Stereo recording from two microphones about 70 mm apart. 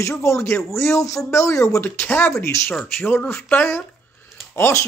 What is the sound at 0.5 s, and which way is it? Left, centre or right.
Speech, left.